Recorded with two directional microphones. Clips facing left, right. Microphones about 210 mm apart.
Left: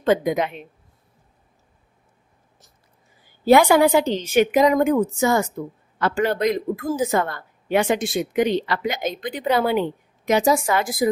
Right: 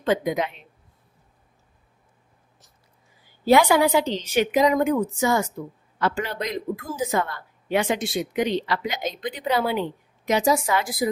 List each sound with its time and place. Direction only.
0.0 s a woman's voice: 50° left (ahead or behind)
3.4 s a woman's voice: 50° left (ahead or behind)